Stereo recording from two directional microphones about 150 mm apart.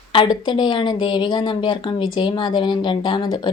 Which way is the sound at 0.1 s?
35° left (ahead or behind).